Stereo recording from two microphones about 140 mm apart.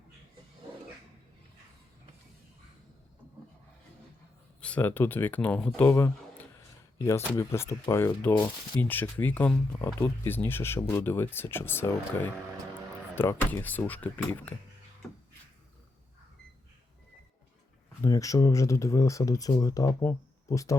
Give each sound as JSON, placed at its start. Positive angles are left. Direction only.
{"t": 4.6, "sound": "speech", "side_deg": 10}
{"t": 18.0, "sound": "speech", "side_deg": 25}